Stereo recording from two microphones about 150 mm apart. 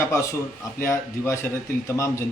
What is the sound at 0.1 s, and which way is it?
Speech, 20° left (ahead or behind).